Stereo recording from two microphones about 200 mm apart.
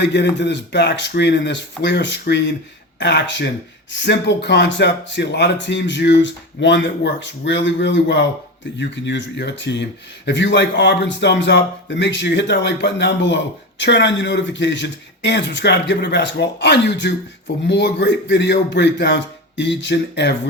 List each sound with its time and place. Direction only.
0.0 s speech: 60° left (ahead or behind)